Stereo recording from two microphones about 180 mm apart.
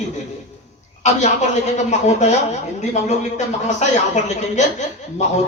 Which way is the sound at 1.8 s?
40° left (ahead or behind).